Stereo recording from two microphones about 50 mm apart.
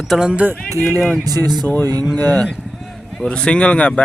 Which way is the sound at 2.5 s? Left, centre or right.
Centre.